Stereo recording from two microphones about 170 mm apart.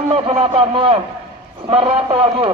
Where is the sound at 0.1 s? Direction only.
35° right (ahead or behind).